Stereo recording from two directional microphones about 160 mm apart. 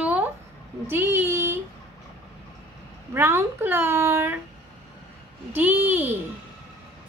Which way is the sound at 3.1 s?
15° right (ahead or behind).